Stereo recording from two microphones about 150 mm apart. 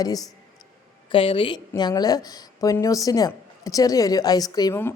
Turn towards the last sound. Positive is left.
turn(degrees=25)  # may be behind; listen again after turning